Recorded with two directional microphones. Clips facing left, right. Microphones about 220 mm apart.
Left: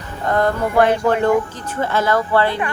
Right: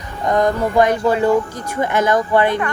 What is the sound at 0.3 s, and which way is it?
Speech, 15° right (ahead or behind).